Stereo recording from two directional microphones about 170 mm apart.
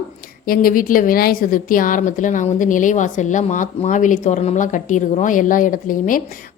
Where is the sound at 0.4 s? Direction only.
55° left (ahead or behind).